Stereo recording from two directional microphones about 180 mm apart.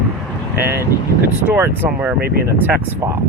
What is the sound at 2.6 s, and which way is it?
Speech, 15° right (ahead or behind).